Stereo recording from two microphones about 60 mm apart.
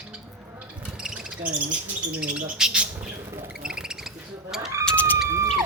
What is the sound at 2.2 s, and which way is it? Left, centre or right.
Speech, centre.